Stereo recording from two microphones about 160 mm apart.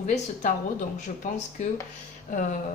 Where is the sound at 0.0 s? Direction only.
50° left (ahead or behind).